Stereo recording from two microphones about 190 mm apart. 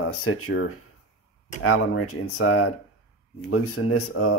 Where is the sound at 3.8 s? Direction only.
90° left.